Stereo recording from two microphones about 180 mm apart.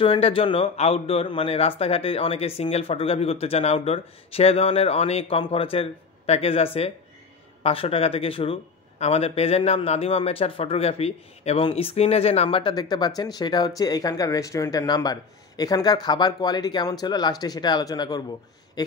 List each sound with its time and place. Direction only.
0.0 s speech: 30° left (ahead or behind)